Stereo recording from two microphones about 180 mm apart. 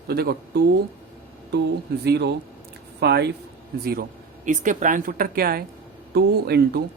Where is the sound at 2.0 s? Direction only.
70° right (ahead or behind).